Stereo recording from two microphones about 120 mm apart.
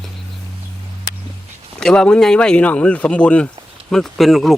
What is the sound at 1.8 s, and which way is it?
Speech, 5° left (ahead or behind).